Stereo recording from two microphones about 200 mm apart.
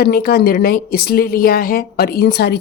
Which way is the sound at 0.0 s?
50° left (ahead or behind).